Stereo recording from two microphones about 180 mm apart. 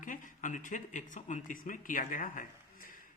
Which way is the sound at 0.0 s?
45° left (ahead or behind).